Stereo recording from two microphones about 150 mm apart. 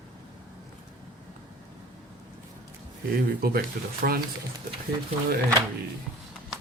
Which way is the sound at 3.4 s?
85° right.